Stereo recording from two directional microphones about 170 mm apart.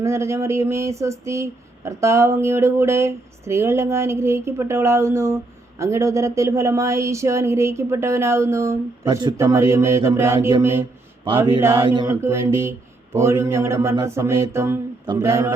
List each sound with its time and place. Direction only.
0.0 s speech: 15° right (ahead or behind)
11.6 s speech: 15° right (ahead or behind)
11.9 s mantra: 25° right (ahead or behind)
12.2 s speech: 15° right (ahead or behind)